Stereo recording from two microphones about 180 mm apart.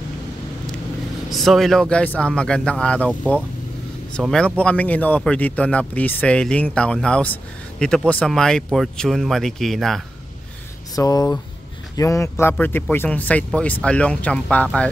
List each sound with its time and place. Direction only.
1.3 s speech: centre (ahead or behind)
11.0 s speech: 20° left (ahead or behind)